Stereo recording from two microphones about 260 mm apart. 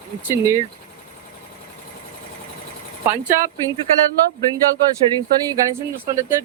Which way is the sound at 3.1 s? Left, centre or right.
Centre.